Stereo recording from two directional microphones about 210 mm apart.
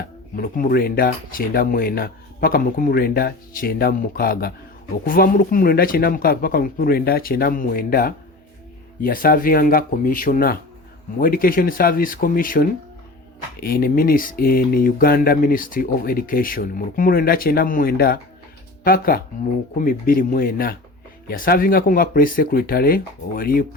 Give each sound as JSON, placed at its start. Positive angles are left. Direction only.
{"t": 0.3, "sound": "speech", "side_deg": 45}